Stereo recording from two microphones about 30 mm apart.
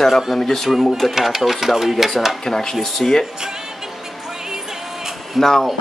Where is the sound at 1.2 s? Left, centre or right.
Centre.